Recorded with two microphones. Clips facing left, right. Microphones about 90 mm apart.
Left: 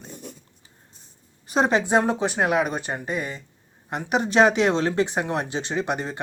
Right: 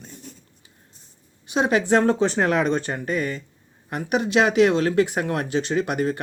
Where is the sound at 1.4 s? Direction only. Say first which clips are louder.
Left 1 dB; 40° left (ahead or behind).